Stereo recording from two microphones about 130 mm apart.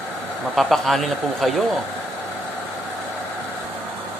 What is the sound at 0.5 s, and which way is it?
A man's voice, centre (ahead or behind).